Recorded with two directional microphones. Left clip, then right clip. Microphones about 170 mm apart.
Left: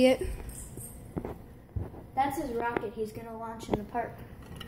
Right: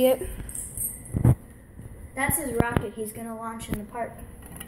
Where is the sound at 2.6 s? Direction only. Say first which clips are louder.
Right 6 dB; 50° left (ahead or behind).